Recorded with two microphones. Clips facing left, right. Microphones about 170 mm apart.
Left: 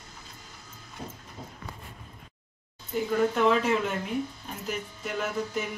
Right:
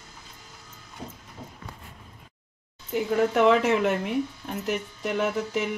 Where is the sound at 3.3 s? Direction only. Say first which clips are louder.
Right 4 dB; 70° right (ahead or behind).